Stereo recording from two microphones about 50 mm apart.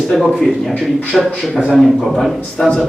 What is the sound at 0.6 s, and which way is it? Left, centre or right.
A man's voice, centre.